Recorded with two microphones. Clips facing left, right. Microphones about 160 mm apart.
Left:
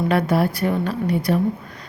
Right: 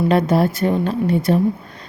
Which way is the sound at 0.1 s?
25° right (ahead or behind).